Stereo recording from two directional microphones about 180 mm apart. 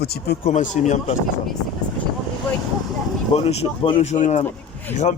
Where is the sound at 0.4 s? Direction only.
45° left (ahead or behind).